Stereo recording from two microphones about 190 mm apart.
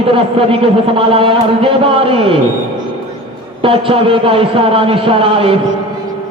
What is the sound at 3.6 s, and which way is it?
A man's voice, 30° right (ahead or behind).